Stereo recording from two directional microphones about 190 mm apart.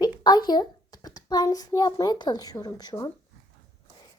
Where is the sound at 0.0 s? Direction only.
20° left (ahead or behind).